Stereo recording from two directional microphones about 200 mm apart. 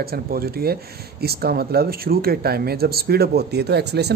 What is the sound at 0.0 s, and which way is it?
Speech, 50° right (ahead or behind).